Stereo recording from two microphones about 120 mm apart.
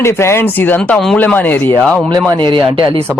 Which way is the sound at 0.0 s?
20° left (ahead or behind).